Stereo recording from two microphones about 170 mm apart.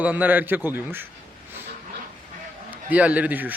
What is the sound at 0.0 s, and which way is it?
Speech, 10° right (ahead or behind).